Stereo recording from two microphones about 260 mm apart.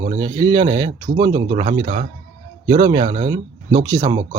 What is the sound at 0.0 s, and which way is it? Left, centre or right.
Speech, centre.